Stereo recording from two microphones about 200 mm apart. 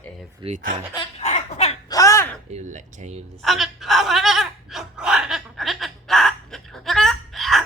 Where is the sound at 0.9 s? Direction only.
30° left (ahead or behind).